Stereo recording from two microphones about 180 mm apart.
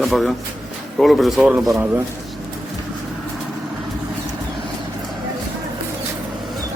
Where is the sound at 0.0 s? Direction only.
Centre (ahead or behind).